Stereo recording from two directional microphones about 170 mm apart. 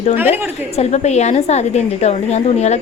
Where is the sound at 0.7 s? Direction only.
40° left (ahead or behind).